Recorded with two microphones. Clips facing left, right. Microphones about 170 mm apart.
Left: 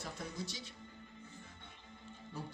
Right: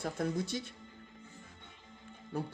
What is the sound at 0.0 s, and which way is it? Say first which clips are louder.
Speech: right 10 dB; 55° right (ahead or behind).